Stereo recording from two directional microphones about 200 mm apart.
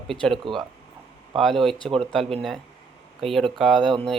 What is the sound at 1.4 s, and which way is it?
Speech, centre (ahead or behind).